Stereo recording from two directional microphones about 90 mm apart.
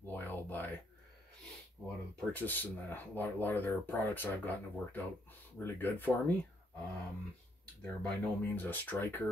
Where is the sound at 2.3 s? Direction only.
20° left (ahead or behind).